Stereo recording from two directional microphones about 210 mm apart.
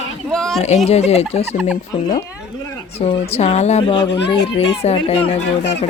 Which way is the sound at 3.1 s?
30° left (ahead or behind).